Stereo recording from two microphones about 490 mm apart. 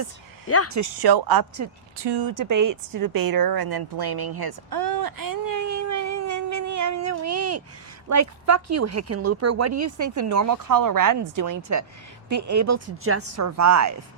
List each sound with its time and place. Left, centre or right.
0.4 s speech: left
0.7 s speech: right
2.0 s speech: right
2.3 s a sound: right
8.1 s speech: right